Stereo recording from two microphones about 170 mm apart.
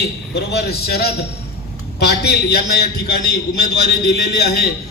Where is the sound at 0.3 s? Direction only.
75° left (ahead or behind).